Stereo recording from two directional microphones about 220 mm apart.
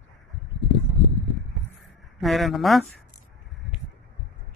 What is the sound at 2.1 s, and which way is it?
Speech, centre (ahead or behind).